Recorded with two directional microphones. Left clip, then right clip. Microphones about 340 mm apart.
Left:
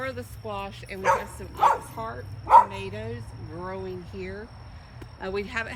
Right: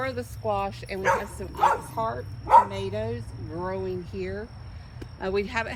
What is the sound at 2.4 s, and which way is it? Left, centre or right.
Speech, left.